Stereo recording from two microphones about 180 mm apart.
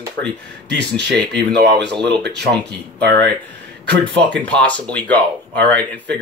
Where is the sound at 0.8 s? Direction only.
70° right (ahead or behind).